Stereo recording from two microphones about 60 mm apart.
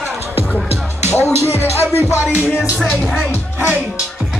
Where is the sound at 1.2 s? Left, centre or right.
Right.